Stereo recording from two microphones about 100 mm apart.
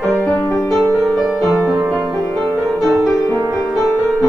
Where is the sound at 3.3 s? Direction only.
35° right (ahead or behind).